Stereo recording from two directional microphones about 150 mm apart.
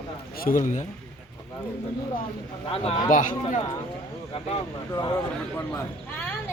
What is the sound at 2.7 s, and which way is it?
Speech, 40° left (ahead or behind).